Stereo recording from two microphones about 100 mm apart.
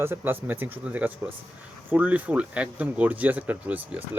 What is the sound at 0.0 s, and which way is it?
Speech, 25° right (ahead or behind).